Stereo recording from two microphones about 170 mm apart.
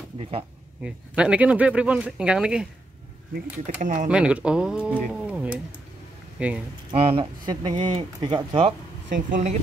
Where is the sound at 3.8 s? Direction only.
50° right (ahead or behind).